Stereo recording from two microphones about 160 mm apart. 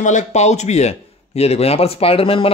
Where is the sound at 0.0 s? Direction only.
45° left (ahead or behind).